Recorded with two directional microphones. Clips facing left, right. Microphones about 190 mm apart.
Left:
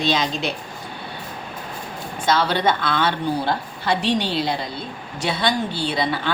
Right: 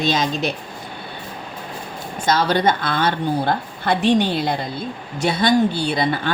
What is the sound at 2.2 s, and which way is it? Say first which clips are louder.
A woman's voice: right 2 dB; 45° right (ahead or behind).